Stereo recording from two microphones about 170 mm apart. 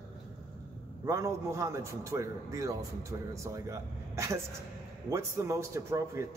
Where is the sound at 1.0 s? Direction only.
15° right (ahead or behind).